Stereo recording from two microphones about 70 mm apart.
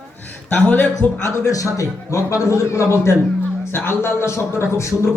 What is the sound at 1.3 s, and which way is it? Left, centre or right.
A man's voice, left.